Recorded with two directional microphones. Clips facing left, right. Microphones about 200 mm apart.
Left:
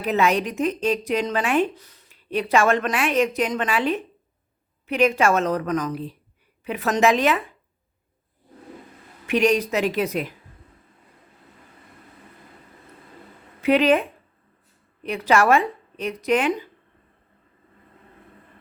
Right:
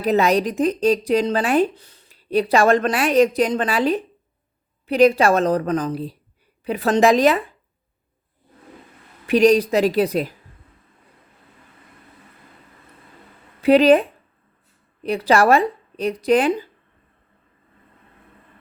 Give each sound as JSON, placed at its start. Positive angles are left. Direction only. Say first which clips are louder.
{"t": 0.0, "sound": "speech", "louder": "right 4 dB", "side_deg": -35}
{"t": 9.2, "sound": "speech", "louder": "right 5 dB", "side_deg": -35}
{"t": 13.6, "sound": "speech", "louder": "right 5 dB", "side_deg": -35}